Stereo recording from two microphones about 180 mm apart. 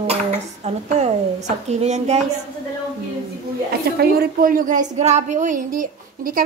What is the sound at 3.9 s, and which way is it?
Speech, 55° right (ahead or behind).